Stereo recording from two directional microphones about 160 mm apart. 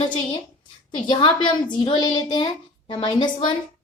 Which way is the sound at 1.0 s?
30° left (ahead or behind).